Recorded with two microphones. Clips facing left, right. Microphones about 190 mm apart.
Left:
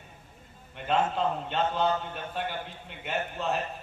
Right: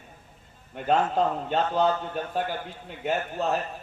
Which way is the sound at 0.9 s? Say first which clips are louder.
Right 4 dB; 40° right (ahead or behind).